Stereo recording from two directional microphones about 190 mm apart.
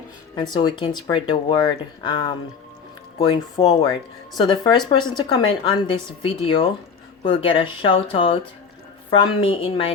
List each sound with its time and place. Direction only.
0.3 s a woman's voice: 20° left (ahead or behind)